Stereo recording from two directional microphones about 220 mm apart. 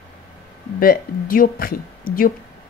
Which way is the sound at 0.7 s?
40° left (ahead or behind).